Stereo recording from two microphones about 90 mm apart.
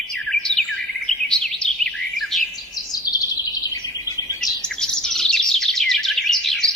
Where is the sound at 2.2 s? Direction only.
Centre (ahead or behind).